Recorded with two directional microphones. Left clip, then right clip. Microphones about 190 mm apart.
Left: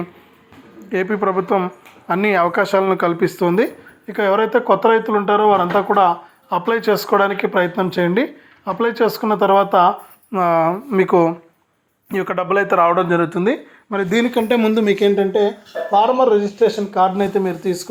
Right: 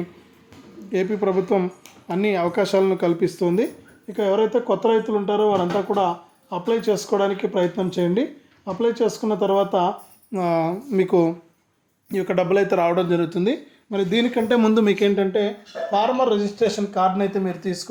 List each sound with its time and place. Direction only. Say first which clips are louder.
0.9 s speech: left 3 dB; 5° right (ahead or behind)
12.9 s speech: left 5 dB; 15° right (ahead or behind)
14.0 s speech: left 3 dB; 5° right (ahead or behind)
14.9 s speech: left 5 dB; 5° left (ahead or behind)